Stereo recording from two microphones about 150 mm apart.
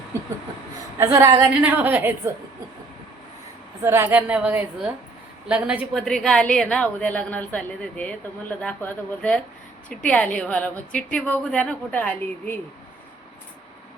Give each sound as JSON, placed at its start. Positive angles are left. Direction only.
{"t": 0.9, "sound": "a woman's voice", "side_deg": -20}
{"t": 3.8, "sound": "a woman's voice", "side_deg": -15}